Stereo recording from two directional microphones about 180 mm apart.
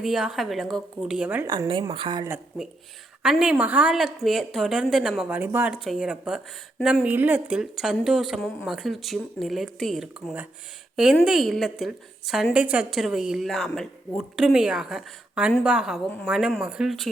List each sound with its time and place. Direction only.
0.0 s a woman's voice: centre (ahead or behind)
1.5 s speech: 25° right (ahead or behind)
3.2 s a woman's voice: 5° right (ahead or behind)